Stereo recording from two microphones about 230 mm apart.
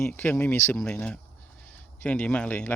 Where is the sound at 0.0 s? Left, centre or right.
Centre.